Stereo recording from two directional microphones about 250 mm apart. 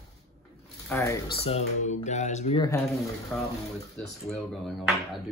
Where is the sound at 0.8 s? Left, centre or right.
Centre.